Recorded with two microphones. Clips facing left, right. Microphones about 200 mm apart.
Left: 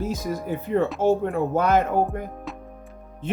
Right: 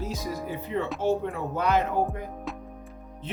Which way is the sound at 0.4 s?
50° left (ahead or behind).